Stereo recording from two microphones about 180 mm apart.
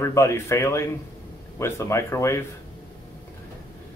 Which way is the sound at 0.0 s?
15° left (ahead or behind).